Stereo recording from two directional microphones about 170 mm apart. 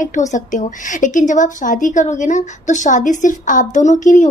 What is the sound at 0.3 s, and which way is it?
A woman's voice, 45° left (ahead or behind).